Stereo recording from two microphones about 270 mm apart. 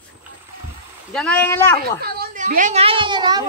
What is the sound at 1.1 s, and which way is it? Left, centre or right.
Speech, centre.